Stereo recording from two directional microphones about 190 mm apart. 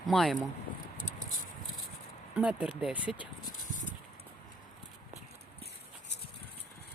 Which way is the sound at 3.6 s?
45° left (ahead or behind).